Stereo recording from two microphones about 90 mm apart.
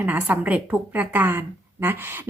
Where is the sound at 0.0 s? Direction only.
20° right (ahead or behind).